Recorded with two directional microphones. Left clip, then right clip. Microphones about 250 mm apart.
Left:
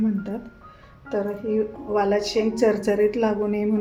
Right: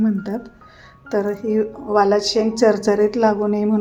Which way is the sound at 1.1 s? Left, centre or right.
Right.